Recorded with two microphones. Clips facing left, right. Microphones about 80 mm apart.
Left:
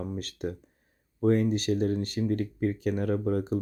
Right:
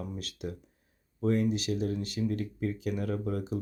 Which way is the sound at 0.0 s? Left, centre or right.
Left.